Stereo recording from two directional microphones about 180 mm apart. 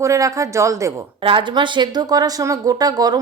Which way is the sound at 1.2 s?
30° right (ahead or behind).